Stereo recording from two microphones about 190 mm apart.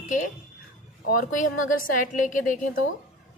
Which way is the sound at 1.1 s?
45° left (ahead or behind).